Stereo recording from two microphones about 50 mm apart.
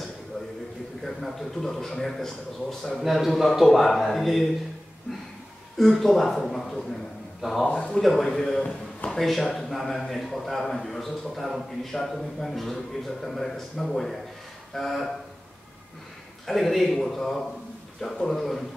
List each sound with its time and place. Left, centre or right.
1.0 s a man's voice: centre
5.8 s a man's voice: centre
8.0 s a man's voice: centre
16.4 s a man's voice: centre